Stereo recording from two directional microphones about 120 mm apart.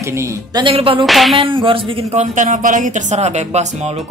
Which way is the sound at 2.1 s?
90° right.